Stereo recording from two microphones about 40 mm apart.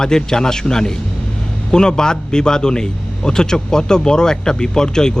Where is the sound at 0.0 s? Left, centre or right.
Centre.